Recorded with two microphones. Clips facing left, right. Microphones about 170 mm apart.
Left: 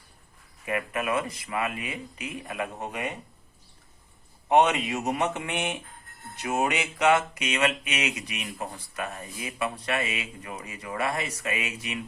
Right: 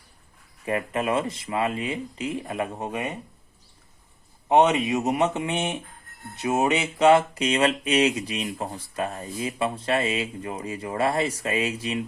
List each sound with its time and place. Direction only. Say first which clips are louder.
0.6 s speech: right 3 dB; 30° right (ahead or behind)
4.4 s speech: right 3 dB; 20° right (ahead or behind)
6.4 s a sound: right 4 dB; 20° right (ahead or behind)
8.4 s speech: right 4 dB; 25° right (ahead or behind)